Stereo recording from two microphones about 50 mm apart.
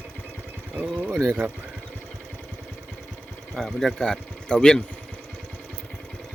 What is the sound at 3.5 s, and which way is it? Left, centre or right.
Speech, centre.